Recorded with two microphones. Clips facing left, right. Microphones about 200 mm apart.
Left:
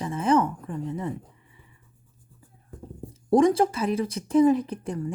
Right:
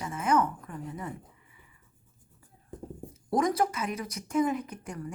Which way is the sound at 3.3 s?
25° left (ahead or behind).